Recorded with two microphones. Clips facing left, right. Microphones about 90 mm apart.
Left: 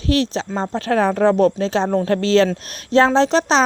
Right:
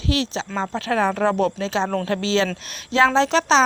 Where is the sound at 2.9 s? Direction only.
40° left (ahead or behind).